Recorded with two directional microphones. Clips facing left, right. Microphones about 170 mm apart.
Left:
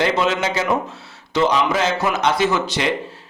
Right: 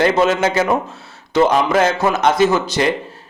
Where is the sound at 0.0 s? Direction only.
50° right (ahead or behind).